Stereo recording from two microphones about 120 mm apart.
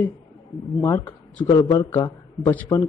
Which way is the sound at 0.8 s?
15° left (ahead or behind).